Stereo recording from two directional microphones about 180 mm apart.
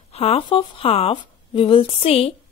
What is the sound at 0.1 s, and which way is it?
A woman's voice, 35° left (ahead or behind).